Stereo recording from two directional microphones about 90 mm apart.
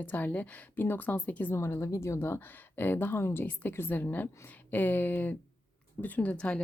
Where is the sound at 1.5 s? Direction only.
30° left (ahead or behind).